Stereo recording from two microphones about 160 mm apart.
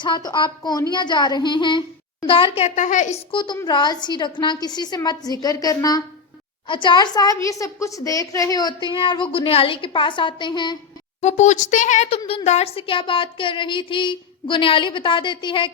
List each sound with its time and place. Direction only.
0.0 s a woman's voice: 25° left (ahead or behind); by 3.2 s 50° left (ahead or behind)
3.3 s a woman's voice: 30° left (ahead or behind)
11.2 s speech: 45° left (ahead or behind); by 15.7 s 30° left (ahead or behind)